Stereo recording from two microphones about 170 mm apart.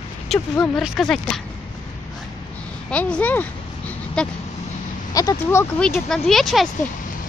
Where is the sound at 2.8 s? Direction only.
5° left (ahead or behind).